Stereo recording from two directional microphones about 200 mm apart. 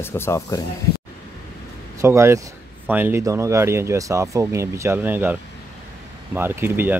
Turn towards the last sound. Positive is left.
turn(degrees=-10)  # may be behind; listen again after turning